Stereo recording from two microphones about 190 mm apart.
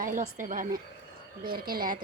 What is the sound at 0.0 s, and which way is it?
A woman's voice, 45° right (ahead or behind).